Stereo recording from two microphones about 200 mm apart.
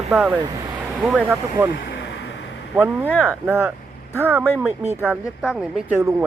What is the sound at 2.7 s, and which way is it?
A man's voice, 10° right (ahead or behind).